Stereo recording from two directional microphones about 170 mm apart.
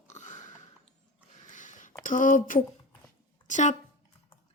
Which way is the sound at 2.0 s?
50° left (ahead or behind).